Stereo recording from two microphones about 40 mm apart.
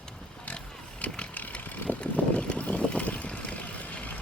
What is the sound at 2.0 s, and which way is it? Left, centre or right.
Vehicle, left.